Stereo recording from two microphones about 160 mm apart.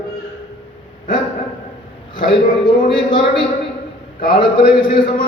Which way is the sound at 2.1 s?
30° left (ahead or behind).